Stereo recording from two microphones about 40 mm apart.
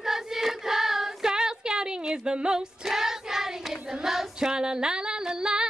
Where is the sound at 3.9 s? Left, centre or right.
Centre.